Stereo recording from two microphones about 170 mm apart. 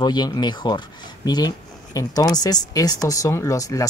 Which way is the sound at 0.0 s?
25° left (ahead or behind).